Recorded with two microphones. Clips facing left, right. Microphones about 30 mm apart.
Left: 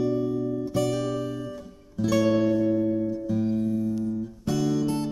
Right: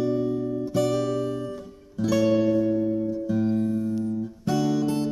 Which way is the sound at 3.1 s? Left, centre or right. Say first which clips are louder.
Right 2 dB; centre.